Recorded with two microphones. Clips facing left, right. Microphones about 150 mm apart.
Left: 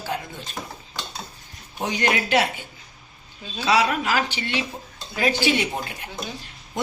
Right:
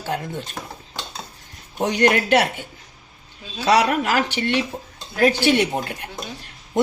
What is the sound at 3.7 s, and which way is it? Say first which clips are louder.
A woman's voice: right 3 dB; 55° right (ahead or behind).